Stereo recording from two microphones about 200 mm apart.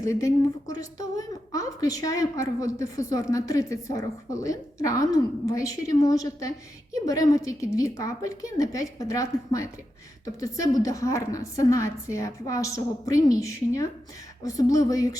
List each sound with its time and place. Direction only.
0.0 s a woman's voice: 15° left (ahead or behind)